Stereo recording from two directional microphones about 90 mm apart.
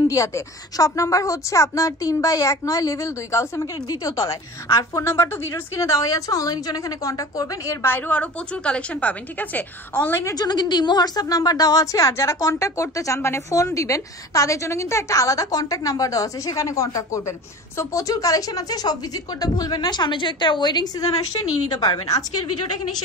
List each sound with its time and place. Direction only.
0.1 s a woman's voice: 35° left (ahead or behind)
7.9 s a woman's voice: 15° left (ahead or behind)
10.2 s a woman's voice: 45° left (ahead or behind)